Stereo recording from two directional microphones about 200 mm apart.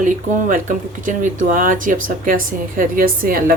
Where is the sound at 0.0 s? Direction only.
45° right (ahead or behind).